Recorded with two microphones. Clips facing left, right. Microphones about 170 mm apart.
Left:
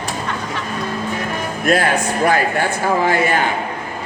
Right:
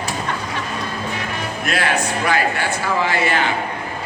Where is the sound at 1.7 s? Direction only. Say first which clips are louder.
Left 5 dB; 45° left (ahead or behind).